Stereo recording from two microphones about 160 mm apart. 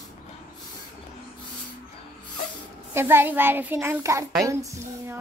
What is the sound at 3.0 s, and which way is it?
A child's voice, 15° right (ahead or behind).